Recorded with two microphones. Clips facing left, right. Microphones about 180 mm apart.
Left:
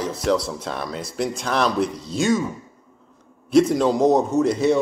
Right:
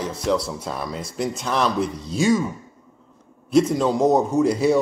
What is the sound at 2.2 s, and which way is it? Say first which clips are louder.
Speech: right 1 dB; 5° right (ahead or behind).